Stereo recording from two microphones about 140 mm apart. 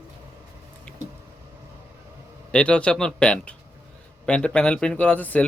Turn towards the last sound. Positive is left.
turn(degrees=10)  # may be behind; listen again after turning